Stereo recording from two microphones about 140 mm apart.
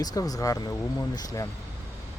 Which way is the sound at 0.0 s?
25° left (ahead or behind).